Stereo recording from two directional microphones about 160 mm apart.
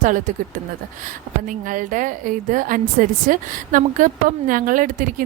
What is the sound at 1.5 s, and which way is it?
A woman's voice, 55° right (ahead or behind).